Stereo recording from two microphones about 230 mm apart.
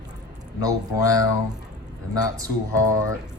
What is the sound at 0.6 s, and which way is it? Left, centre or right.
Speech, centre.